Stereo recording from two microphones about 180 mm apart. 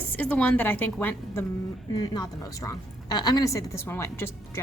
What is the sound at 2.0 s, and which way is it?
A woman's voice, 20° left (ahead or behind).